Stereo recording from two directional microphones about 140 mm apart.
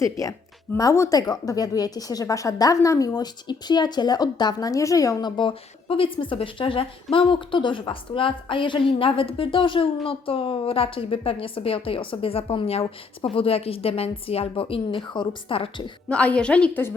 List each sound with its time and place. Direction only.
0.0 s speech: 25° left (ahead or behind)
5.4 s a woman's voice: 40° left (ahead or behind)
16.0 s a woman's voice: 10° left (ahead or behind)